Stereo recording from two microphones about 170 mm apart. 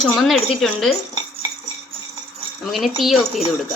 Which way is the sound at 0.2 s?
Centre (ahead or behind).